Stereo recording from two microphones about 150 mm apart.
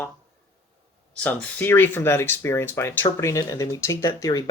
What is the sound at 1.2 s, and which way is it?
Speech, 10° left (ahead or behind).